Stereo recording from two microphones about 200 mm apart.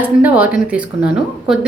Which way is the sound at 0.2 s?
5° right (ahead or behind).